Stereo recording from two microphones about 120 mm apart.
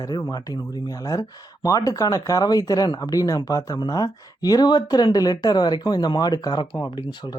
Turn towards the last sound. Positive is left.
turn(degrees=35)  # may be behind; listen again after turning